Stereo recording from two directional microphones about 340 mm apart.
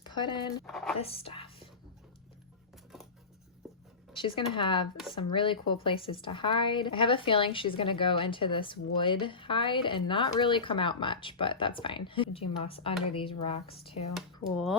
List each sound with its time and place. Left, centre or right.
0.0 s speech: centre
0.6 s speech: centre
0.9 s a sound: centre
4.1 s a woman's voice: centre
14.2 s speech: centre